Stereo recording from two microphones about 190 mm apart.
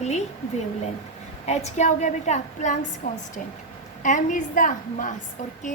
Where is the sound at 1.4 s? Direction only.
35° left (ahead or behind).